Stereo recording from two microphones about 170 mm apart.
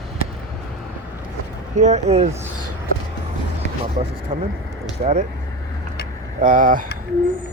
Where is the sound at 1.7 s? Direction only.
45° right (ahead or behind).